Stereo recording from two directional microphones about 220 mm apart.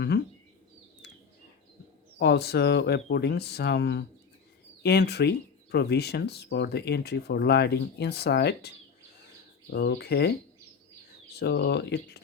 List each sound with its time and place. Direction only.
0.1 s a sound: 50° left (ahead or behind)
2.1 s speech: 50° left (ahead or behind)
11.3 s speech: 50° left (ahead or behind)